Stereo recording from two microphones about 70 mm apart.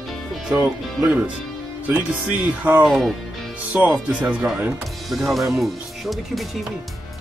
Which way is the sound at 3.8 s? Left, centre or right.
Centre.